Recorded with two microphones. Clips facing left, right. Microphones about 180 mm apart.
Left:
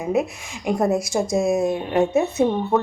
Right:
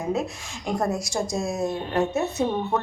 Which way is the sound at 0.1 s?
15° left (ahead or behind).